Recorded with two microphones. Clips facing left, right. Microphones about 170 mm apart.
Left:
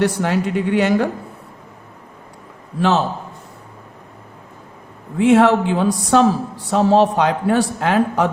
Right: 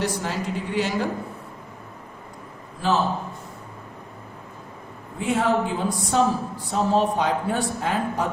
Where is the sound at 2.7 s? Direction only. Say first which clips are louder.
Left 6 dB; 75° left (ahead or behind).